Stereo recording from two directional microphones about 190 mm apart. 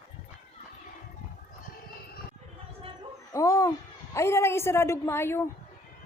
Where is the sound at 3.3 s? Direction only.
15° left (ahead or behind).